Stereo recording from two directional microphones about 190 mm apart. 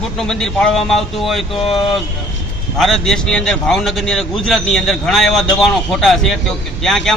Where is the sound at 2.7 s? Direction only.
Centre (ahead or behind).